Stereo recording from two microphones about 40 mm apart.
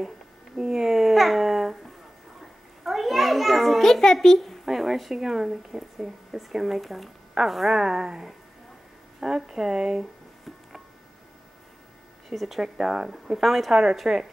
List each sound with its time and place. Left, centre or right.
0.6 s babbling: centre
2.8 s a child's voice: centre
7.7 s speech: centre
12.3 s speech: centre
13.4 s speech: centre